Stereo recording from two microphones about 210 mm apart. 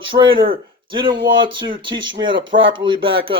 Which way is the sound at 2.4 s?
65° right (ahead or behind).